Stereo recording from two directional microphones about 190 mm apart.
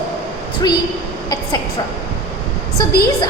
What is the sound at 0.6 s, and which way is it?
Speech, 20° left (ahead or behind).